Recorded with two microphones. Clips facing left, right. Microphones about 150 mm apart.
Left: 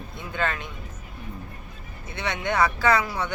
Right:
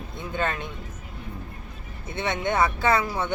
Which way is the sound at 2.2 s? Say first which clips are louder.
Even; 20° right (ahead or behind).